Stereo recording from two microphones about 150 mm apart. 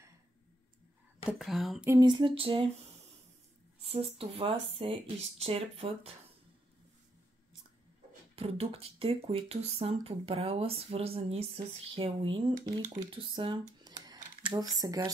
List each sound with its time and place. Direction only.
1.2 s speech: centre (ahead or behind)
2.0 s speech: 30° right (ahead or behind)
3.8 s speech: 40° right (ahead or behind)
8.4 s speech: 40° right (ahead or behind)
12.6 s speech: 60° right (ahead or behind)
13.1 s speech: 30° right (ahead or behind)
14.0 s typing: 30° right (ahead or behind)